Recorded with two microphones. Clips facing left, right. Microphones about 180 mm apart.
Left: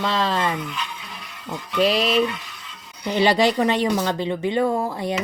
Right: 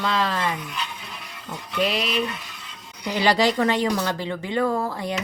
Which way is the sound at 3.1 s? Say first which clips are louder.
Left 2 dB; 20° left (ahead or behind).